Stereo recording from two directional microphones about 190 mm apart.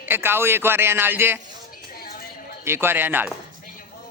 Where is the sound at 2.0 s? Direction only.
50° left (ahead or behind).